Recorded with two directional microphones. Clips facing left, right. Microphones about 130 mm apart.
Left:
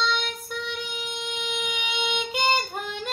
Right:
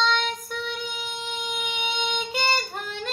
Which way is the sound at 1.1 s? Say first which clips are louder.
Even; 40° right (ahead or behind).